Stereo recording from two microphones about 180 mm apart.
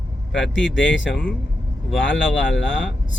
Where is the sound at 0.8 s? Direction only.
90° left.